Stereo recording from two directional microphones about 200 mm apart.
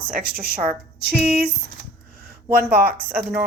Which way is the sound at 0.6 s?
50° right (ahead or behind).